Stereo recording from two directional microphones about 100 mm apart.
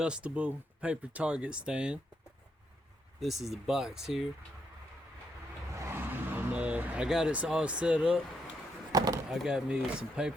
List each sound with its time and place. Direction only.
0.0 s speech: 10° right (ahead or behind)
3.2 s speech: 5° right (ahead or behind)
5.8 s speech: 20° right (ahead or behind)
8.9 s chop: 35° right (ahead or behind)
9.3 s speech: 5° right (ahead or behind)